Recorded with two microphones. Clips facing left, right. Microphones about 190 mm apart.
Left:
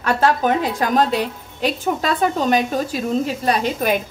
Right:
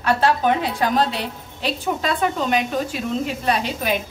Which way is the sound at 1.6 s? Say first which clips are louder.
Left 3 dB; 40° left (ahead or behind).